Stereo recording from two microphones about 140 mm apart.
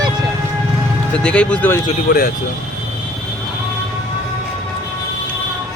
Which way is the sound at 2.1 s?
90° left.